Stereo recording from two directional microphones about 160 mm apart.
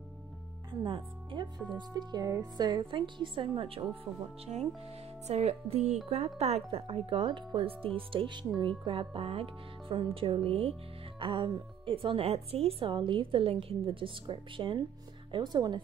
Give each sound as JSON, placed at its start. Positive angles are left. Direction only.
{"t": 0.8, "sound": "a woman's voice", "side_deg": -30}